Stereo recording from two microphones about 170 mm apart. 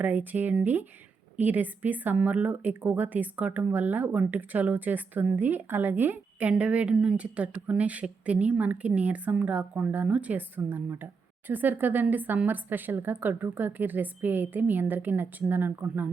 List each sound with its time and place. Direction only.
0.0 s a woman's voice: 10° right (ahead or behind)